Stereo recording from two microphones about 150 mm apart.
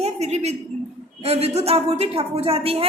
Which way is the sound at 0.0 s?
45° right (ahead or behind).